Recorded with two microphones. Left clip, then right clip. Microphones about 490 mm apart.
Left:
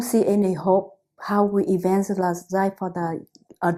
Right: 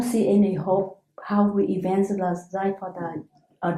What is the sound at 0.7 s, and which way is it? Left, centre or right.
Speech, left.